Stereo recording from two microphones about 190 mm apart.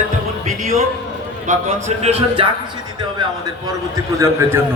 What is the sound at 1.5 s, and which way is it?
A man's voice, 40° right (ahead or behind).